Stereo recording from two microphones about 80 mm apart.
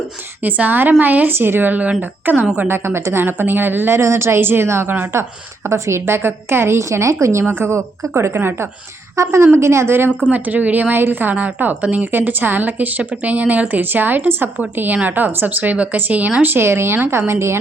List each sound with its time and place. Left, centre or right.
0.4 s a woman's voice: right
10.3 s a woman's voice: right